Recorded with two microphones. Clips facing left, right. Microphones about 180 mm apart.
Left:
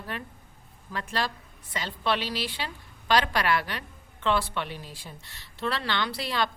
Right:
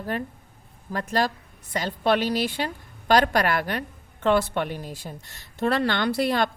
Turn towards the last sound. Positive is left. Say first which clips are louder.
# right 7 dB
turn(degrees=-50)  # may be behind; listen again after turning